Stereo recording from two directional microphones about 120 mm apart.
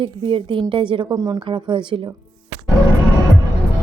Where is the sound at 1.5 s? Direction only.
45° right (ahead or behind).